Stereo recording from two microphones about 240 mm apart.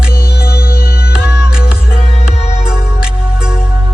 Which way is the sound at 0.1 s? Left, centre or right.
Left.